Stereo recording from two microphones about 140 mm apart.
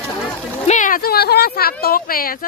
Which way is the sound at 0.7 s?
70° left (ahead or behind).